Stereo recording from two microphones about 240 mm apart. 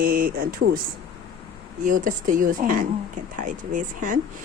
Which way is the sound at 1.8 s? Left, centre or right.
Right.